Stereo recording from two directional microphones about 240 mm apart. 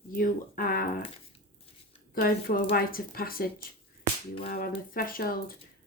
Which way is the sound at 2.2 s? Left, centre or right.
Left.